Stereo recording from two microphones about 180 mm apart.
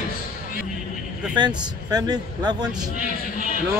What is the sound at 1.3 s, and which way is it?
Speech, 25° right (ahead or behind).